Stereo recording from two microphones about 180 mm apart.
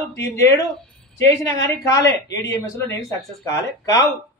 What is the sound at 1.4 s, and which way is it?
Speech, 20° left (ahead or behind).